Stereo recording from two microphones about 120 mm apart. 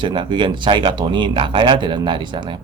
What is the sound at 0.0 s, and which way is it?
Speech, 40° right (ahead or behind).